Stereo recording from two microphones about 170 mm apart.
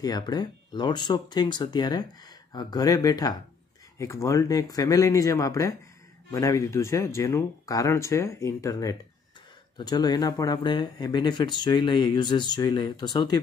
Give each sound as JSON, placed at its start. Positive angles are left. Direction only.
{"t": 0.0, "sound": "speech", "side_deg": 25}